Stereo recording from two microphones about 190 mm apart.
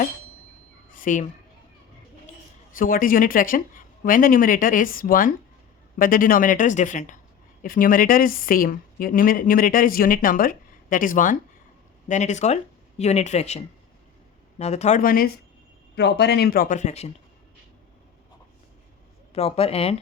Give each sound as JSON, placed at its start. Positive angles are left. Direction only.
{"t": 0.9, "sound": "a woman's voice", "side_deg": 40}
{"t": 2.7, "sound": "a woman's voice", "side_deg": 45}
{"t": 14.6, "sound": "speech", "side_deg": 35}
{"t": 16.0, "sound": "a woman's voice", "side_deg": 60}
{"t": 19.3, "sound": "speech", "side_deg": 30}